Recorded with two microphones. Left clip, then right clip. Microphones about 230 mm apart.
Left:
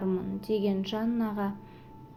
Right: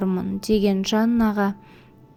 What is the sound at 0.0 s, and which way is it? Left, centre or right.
A woman's voice, right.